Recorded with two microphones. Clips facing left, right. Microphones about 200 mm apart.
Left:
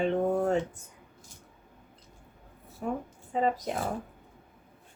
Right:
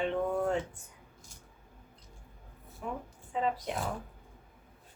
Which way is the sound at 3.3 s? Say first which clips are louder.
Left 4 dB; 40° left (ahead or behind).